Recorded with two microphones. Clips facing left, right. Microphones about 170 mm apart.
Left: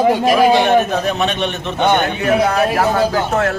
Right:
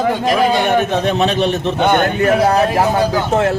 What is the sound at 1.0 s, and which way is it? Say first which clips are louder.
A man's voice: right 3 dB; 35° right (ahead or behind).